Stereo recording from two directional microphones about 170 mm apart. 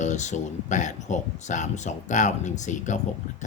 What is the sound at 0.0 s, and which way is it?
Speech, 45° left (ahead or behind).